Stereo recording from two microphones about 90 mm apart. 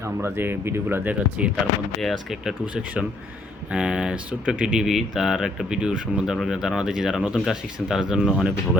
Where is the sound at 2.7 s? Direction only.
10° right (ahead or behind).